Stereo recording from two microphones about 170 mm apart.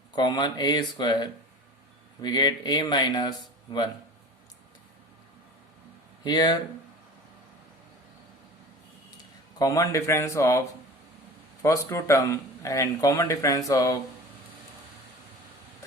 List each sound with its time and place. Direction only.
0.2 s speech: 25° left (ahead or behind)
6.2 s speech: 25° left (ahead or behind)
9.6 s speech: 20° left (ahead or behind)
11.6 s speech: 20° left (ahead or behind)